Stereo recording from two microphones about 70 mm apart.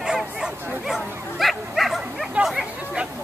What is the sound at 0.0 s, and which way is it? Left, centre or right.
Bow-wow, centre.